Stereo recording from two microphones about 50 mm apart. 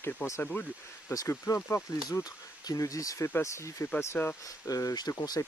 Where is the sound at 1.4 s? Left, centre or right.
Left.